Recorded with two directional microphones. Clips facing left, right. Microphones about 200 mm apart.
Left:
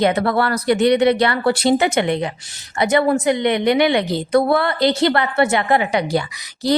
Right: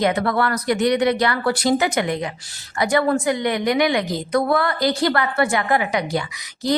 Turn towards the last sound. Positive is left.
turn(degrees=30)  # may be behind; listen again after turning